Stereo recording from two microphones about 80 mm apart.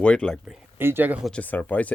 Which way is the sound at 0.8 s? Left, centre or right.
Right.